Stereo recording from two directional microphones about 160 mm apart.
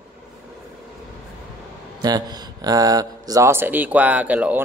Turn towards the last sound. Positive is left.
turn(degrees=-10)  # may be behind; listen again after turning